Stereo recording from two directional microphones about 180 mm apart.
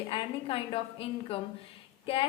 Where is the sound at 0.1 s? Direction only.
30° left (ahead or behind).